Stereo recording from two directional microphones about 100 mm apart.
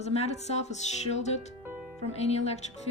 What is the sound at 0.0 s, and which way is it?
Speech, 90° left.